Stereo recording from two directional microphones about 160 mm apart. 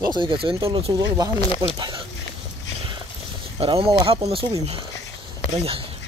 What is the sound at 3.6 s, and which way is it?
Speech, 35° right (ahead or behind).